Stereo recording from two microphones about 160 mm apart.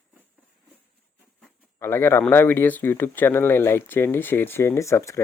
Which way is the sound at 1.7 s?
15° left (ahead or behind).